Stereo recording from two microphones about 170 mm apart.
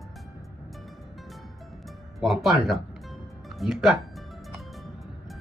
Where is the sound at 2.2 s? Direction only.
Centre (ahead or behind).